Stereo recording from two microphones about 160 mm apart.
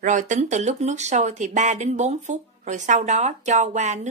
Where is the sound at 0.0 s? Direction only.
50° right (ahead or behind).